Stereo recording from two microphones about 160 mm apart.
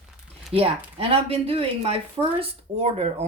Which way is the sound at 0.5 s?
40° right (ahead or behind).